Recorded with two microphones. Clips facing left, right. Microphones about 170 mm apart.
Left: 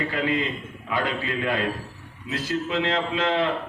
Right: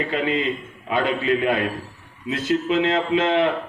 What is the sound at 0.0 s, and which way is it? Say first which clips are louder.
A man's voice: right 3 dB; 20° right (ahead or behind).